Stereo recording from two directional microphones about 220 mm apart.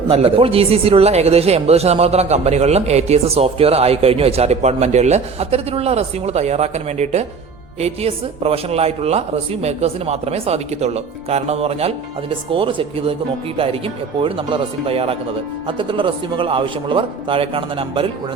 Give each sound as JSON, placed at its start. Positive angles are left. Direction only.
{"t": 0.1, "sound": "speech", "side_deg": -25}